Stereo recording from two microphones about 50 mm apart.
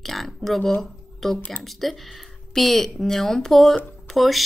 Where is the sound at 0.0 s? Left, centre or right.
Centre.